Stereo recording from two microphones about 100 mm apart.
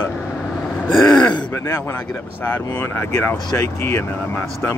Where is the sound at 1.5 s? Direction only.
25° left (ahead or behind).